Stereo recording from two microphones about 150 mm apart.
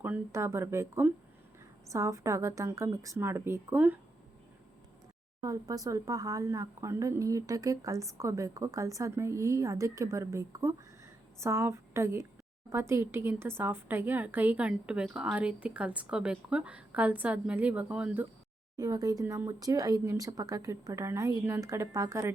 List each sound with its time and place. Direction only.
0.0 s a woman's voice: 15° right (ahead or behind)
5.4 s a woman's voice: 25° right (ahead or behind)
18.8 s speech: 25° right (ahead or behind)